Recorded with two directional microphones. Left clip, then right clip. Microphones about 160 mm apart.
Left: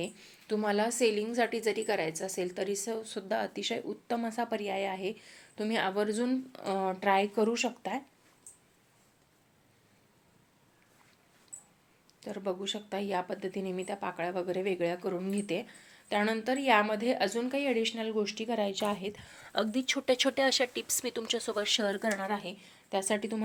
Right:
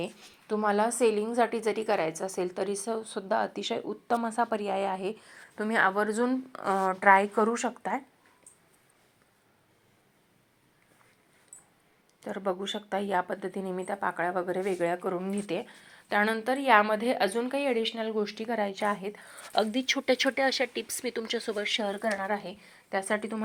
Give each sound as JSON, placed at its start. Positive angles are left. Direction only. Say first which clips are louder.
{"t": 0.0, "sound": "a woman's voice", "louder": "right 2 dB", "side_deg": 0}
{"t": 6.0, "sound": "speech", "louder": "right 4 dB", "side_deg": 20}
{"t": 6.3, "sound": "speech", "louder": "right 4 dB", "side_deg": -30}
{"t": 6.7, "sound": "speech", "louder": "right 6 dB", "side_deg": 5}
{"t": 12.2, "sound": "a woman's voice", "louder": "right 3 dB", "side_deg": -15}
{"t": 18.5, "sound": "a woman's voice", "louder": "right 3 dB", "side_deg": 15}
{"t": 20.2, "sound": "speech", "louder": "right 1 dB", "side_deg": 15}
{"t": 21.6, "sound": "speech", "louder": "even", "side_deg": 30}
{"t": 22.3, "sound": "a woman's voice", "louder": "right 3 dB", "side_deg": 10}